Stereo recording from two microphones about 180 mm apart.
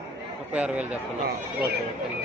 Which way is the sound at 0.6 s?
5° right (ahead or behind).